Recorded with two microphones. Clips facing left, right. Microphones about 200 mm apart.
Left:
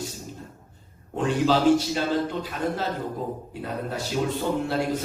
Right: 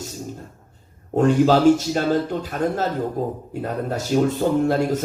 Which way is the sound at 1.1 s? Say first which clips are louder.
Right 6 dB; 45° right (ahead or behind).